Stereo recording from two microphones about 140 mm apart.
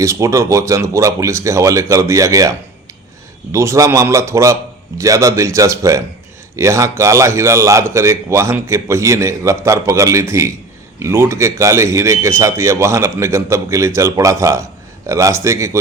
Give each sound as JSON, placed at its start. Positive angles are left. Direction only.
{"t": 0.0, "sound": "speech", "side_deg": -20}